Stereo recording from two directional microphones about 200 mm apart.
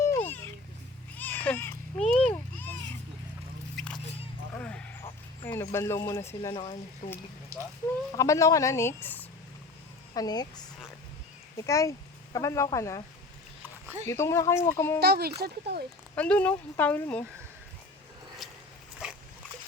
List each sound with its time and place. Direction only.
0.0 s a sound: 10° left (ahead or behind)
4.5 s a sound: 5° left (ahead or behind)
5.0 s speech: 10° left (ahead or behind)
7.0 s speech: 40° left (ahead or behind)
7.5 s speech: 15° right (ahead or behind)
8.1 s speech: 15° left (ahead or behind)
11.5 s speech: 15° left (ahead or behind)
14.1 s speech: 15° left (ahead or behind)
15.0 s speech: 50° right (ahead or behind)
16.1 s speech: 5° left (ahead or behind)
18.4 s a sound: centre (ahead or behind)